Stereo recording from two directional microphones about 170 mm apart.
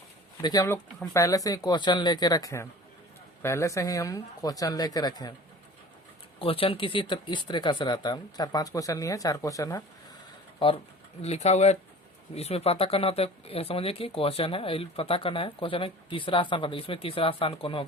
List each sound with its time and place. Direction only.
0.4 s speech: 20° left (ahead or behind)
6.4 s speech: 30° left (ahead or behind)
11.2 s speech: 40° left (ahead or behind)